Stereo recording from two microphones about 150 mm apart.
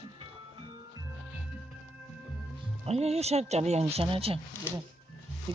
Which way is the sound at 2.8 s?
45° right (ahead or behind).